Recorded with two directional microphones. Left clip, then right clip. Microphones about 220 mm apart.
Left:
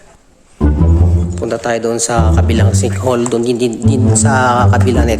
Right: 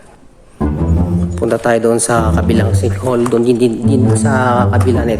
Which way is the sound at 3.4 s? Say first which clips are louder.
Right 2 dB; 15° left (ahead or behind).